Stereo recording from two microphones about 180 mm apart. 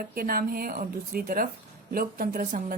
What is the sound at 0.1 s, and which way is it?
A woman's voice, 55° right (ahead or behind).